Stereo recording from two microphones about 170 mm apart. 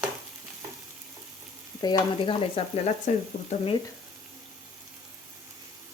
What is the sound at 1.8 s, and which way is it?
Stir, 25° left (ahead or behind).